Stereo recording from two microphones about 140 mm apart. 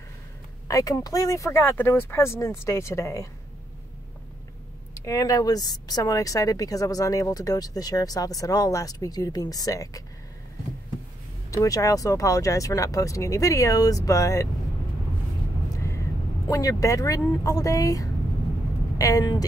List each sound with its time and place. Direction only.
0.7 s speech: 25° left (ahead or behind)
4.9 s speech: 25° left (ahead or behind)
11.5 s speech: 25° left (ahead or behind)
16.4 s speech: 25° left (ahead or behind)